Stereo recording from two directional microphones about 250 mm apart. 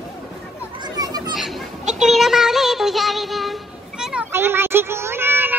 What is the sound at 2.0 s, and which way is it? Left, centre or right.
Music, centre.